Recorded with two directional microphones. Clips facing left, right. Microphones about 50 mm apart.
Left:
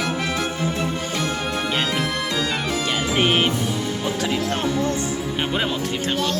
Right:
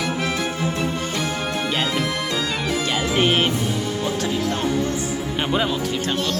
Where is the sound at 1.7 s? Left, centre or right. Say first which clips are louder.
Even; centre.